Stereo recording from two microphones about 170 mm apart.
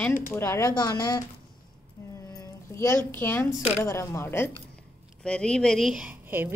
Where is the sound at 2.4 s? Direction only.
15° left (ahead or behind).